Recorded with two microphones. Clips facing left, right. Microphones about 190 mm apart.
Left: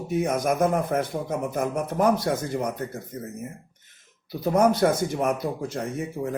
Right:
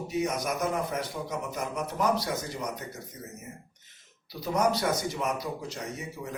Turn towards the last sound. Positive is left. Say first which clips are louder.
# left 8 dB
turn(degrees=55)  # may be behind; listen again after turning